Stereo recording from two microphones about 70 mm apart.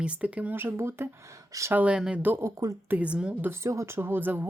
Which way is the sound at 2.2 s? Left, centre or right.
Right.